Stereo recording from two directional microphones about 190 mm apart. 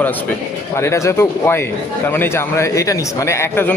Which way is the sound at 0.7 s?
15° left (ahead or behind).